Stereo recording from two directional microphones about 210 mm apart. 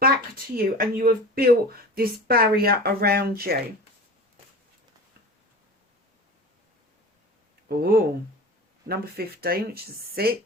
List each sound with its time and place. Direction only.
0.5 s speech: 45° right (ahead or behind)
7.7 s speech: 45° right (ahead or behind)